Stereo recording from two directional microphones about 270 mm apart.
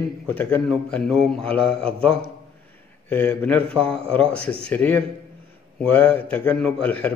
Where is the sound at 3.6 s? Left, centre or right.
Right.